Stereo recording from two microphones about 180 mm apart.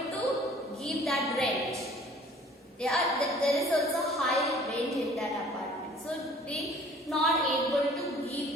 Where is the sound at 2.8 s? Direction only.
Centre (ahead or behind).